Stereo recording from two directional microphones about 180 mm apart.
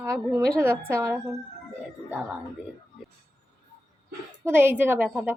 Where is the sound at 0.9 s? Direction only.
15° right (ahead or behind).